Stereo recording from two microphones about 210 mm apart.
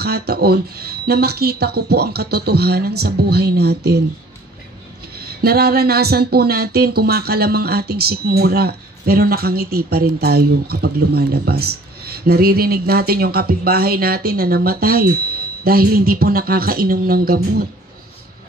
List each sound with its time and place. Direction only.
0.0 s speech: 50° right (ahead or behind)
5.2 s speech: 45° right (ahead or behind)